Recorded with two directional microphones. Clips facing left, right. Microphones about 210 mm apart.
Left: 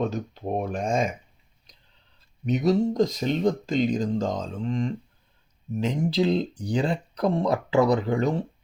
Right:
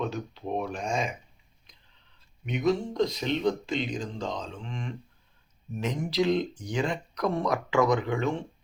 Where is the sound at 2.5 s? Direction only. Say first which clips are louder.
Left 5 dB; 40° left (ahead or behind).